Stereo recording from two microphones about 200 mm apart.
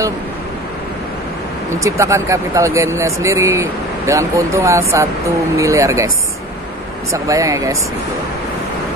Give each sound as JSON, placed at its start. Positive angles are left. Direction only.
{"t": 1.8, "sound": "speech", "side_deg": -15}
{"t": 7.2, "sound": "speech", "side_deg": -15}